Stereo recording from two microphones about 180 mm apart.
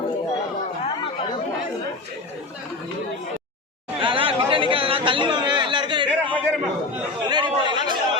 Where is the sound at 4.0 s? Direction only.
30° right (ahead or behind).